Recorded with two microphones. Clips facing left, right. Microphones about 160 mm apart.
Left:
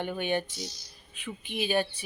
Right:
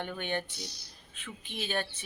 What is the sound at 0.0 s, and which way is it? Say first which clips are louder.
Speech: left 5 dB; 15° left (ahead or behind).